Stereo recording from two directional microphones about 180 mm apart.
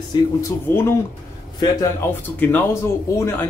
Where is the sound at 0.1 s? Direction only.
15° left (ahead or behind).